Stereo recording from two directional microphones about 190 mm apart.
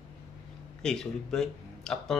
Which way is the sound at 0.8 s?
5° left (ahead or behind).